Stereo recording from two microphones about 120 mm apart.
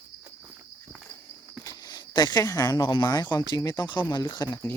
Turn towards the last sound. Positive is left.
turn(degrees=35)  # may be behind; listen again after turning